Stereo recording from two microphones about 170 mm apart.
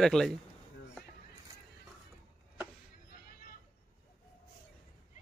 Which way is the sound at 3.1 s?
55° left (ahead or behind).